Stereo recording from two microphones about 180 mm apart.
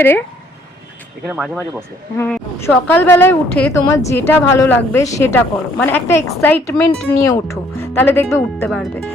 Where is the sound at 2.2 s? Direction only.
10° left (ahead or behind).